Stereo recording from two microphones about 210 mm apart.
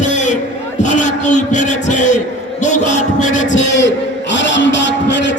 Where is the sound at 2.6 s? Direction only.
35° left (ahead or behind).